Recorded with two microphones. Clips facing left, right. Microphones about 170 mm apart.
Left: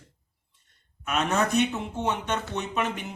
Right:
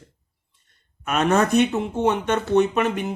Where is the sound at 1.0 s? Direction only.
55° right (ahead or behind).